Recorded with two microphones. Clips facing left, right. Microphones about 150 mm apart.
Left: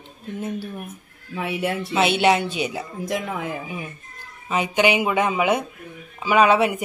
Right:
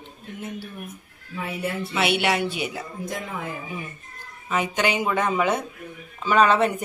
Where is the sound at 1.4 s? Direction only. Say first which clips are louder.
Left 4 dB; 90° left.